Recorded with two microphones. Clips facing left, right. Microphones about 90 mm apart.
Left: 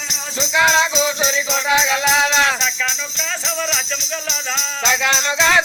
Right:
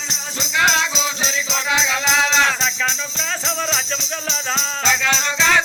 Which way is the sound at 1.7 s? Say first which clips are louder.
Left 3 dB; 15° left (ahead or behind).